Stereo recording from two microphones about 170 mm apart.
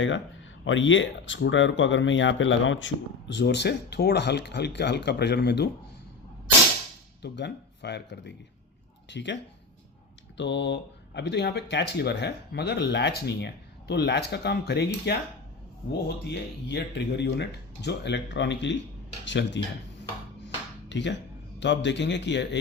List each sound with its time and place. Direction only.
0.7 s speech: 90° left; by 5.6 s 75° left (ahead or behind)
7.2 s speech: 85° left
20.9 s speech: 90° left